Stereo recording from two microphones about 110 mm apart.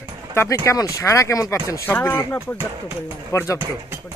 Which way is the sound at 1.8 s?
20° left (ahead or behind).